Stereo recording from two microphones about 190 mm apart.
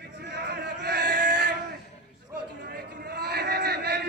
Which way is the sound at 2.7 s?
55° right (ahead or behind).